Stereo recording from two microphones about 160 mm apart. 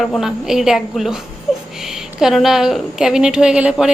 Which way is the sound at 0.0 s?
Centre (ahead or behind).